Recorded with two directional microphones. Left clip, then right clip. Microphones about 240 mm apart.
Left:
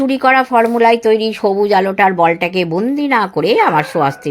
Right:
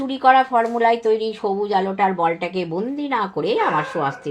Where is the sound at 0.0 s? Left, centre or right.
Left.